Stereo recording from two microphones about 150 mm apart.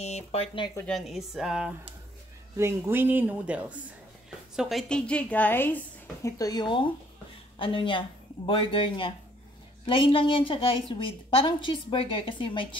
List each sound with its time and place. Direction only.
0.0 s speech: 45° left (ahead or behind)
0.8 s speech: centre (ahead or behind)
2.5 s a woman's voice: 15° right (ahead or behind); by 12.6 s 35° left (ahead or behind)